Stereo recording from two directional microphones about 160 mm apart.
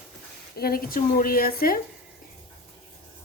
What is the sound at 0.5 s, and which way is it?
Speech, 70° left (ahead or behind).